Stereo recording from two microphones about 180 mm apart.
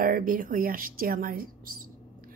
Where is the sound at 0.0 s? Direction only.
50° right (ahead or behind).